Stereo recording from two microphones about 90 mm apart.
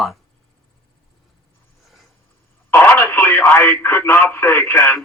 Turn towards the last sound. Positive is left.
turn(degrees=25)  # may be behind; listen again after turning